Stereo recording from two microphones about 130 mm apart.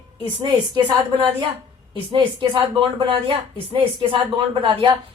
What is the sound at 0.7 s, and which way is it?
A woman's voice, 35° right (ahead or behind).